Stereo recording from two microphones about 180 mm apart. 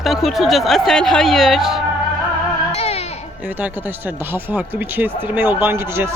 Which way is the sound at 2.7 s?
35° left (ahead or behind).